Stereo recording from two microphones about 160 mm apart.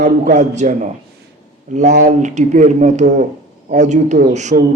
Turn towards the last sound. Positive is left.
turn(degrees=-45)  # may be behind; listen again after turning